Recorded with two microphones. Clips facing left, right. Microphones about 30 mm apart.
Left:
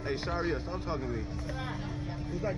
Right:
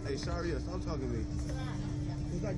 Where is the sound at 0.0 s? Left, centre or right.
Left.